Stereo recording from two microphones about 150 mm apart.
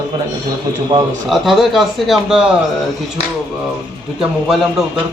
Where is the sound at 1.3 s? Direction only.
Centre (ahead or behind).